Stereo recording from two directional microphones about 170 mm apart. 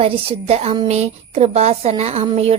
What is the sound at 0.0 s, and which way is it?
A woman's voice, 35° right (ahead or behind).